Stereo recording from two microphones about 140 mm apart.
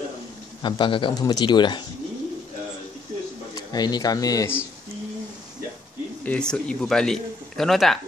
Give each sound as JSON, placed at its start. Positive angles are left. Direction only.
{"t": 0.6, "sound": "a man's voice", "side_deg": 35}
{"t": 3.5, "sound": "speech", "side_deg": 30}
{"t": 6.2, "sound": "a man's voice", "side_deg": 10}